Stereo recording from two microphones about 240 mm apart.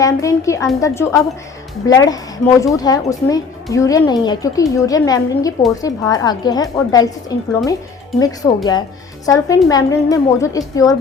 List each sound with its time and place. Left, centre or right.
0.0 s speech: centre